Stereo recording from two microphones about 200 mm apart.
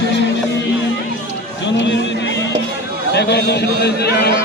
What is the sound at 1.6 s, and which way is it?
Music, 65° left (ahead or behind).